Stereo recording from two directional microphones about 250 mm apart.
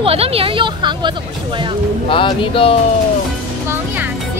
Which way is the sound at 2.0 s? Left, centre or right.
Left.